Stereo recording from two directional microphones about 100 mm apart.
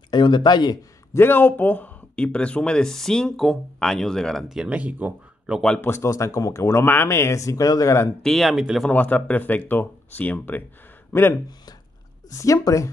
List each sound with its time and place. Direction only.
0.1 s speech: 50° left (ahead or behind)
1.1 s speech: 20° left (ahead or behind); by 5.6 s 15° right (ahead or behind)
5.8 s speech: 25° left (ahead or behind)
8.2 s speech: 5° left (ahead or behind)
8.8 s speech: 15° left (ahead or behind)
12.3 s speech: 35° left (ahead or behind)